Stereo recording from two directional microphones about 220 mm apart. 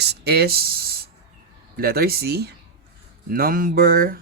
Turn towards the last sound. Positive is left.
turn(degrees=-40)  # may be behind; listen again after turning